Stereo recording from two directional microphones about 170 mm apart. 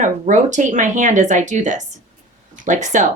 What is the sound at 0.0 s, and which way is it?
Speech, 45° right (ahead or behind).